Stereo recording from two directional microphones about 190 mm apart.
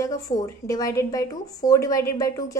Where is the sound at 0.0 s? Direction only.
20° left (ahead or behind).